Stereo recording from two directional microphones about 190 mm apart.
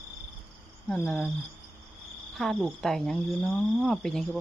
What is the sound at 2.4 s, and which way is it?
Speech, centre (ahead or behind).